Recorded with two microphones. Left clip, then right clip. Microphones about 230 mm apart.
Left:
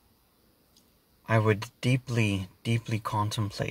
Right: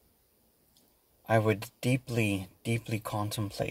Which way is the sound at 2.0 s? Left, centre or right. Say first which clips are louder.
Left 1 dB; left.